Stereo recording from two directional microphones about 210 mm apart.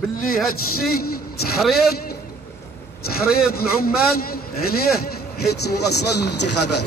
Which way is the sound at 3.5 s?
45° left (ahead or behind).